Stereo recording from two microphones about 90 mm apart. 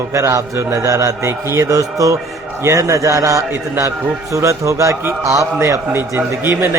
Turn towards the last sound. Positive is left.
turn(degrees=-25)  # may be behind; listen again after turning